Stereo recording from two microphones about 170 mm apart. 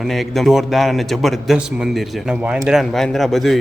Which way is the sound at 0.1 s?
Centre (ahead or behind).